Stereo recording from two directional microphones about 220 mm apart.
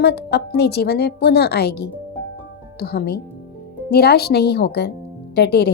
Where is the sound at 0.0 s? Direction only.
50° left (ahead or behind).